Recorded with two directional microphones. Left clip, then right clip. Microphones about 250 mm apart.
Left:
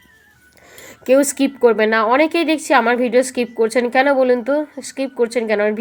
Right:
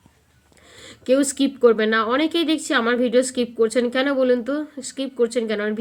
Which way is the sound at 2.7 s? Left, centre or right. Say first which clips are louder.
Left 7 dB; centre.